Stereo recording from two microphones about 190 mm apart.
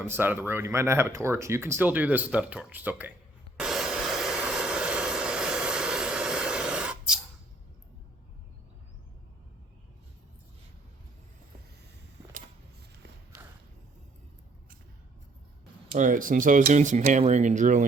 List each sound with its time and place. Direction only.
0.0 s speech: 10° right (ahead or behind)
3.6 s vehicle: centre (ahead or behind)
15.9 s speech: 45° right (ahead or behind)